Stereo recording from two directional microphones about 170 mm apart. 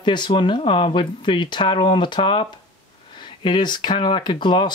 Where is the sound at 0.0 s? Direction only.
25° left (ahead or behind).